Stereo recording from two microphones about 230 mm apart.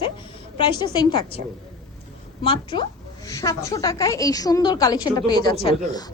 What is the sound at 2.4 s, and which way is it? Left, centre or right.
A woman's voice, left.